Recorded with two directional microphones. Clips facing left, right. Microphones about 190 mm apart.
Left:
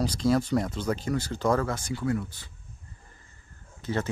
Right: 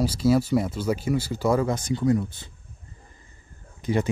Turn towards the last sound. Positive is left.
turn(degrees=-15)  # may be behind; listen again after turning